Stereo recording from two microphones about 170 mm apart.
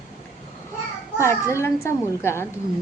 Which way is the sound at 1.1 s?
15° left (ahead or behind).